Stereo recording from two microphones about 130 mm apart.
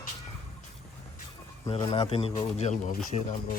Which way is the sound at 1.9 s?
45° left (ahead or behind).